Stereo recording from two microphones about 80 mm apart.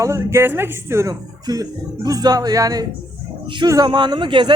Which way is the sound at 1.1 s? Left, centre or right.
Right.